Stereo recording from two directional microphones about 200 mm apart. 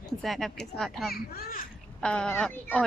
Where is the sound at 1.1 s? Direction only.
50° left (ahead or behind).